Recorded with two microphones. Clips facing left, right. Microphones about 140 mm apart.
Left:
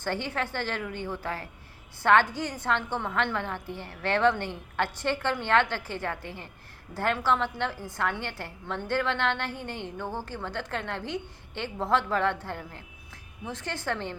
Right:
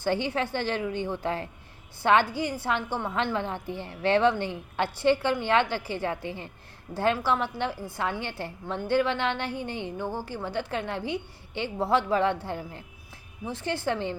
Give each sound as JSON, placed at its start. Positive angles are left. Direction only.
{"t": 0.0, "sound": "a woman's voice", "side_deg": -15}